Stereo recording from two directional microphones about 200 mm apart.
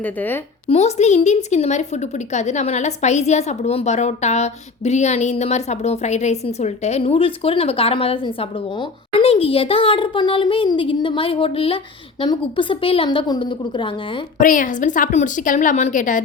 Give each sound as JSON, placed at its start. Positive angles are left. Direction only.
{"t": 0.0, "sound": "a woman's voice", "side_deg": 10}
{"t": 0.7, "sound": "a woman's voice", "side_deg": 35}
{"t": 14.3, "sound": "a woman's voice", "side_deg": 40}